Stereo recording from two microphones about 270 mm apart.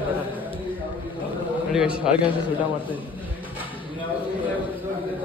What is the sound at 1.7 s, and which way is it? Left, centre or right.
Speech, centre.